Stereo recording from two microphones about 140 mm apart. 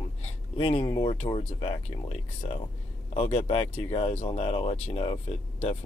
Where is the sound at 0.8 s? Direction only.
35° left (ahead or behind).